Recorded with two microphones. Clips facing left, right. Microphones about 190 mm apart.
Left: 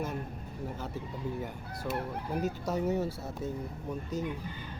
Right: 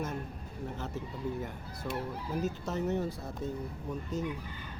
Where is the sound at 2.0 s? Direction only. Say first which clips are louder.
Even; 55° left (ahead or behind).